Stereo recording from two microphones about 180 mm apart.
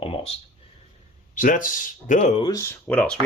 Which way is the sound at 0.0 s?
35° left (ahead or behind).